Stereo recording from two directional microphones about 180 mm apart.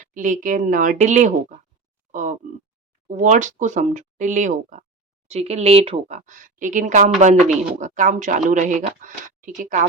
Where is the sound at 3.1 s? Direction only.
40° right (ahead or behind).